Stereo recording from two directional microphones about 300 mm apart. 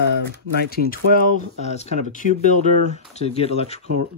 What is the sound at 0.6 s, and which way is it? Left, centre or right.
Speech, left.